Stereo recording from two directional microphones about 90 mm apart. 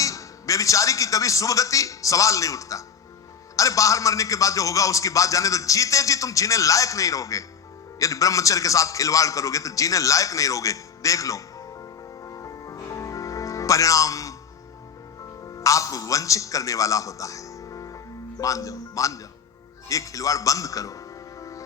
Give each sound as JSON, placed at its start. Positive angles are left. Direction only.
{"t": 0.0, "sound": "a man's voice", "side_deg": 40}
{"t": 12.2, "sound": "music", "side_deg": 40}
{"t": 15.4, "sound": "a man's voice", "side_deg": 40}